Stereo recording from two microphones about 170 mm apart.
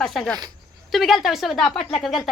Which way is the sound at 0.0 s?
5° left (ahead or behind).